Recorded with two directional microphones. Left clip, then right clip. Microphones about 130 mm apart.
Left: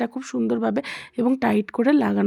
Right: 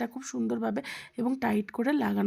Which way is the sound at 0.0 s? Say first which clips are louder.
Left 8 dB; 15° left (ahead or behind).